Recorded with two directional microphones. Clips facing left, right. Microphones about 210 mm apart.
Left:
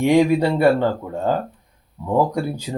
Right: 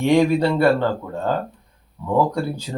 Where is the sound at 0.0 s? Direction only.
15° left (ahead or behind).